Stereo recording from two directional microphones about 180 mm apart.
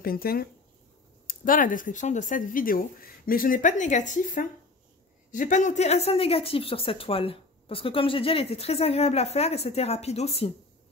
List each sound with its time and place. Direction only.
0.0 s a woman's voice: 55° left (ahead or behind); by 10.5 s 35° left (ahead or behind)